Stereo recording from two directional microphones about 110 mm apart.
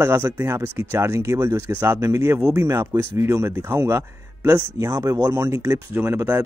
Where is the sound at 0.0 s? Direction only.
25° right (ahead or behind).